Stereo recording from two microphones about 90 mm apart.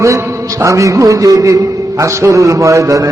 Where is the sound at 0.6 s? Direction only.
35° right (ahead or behind).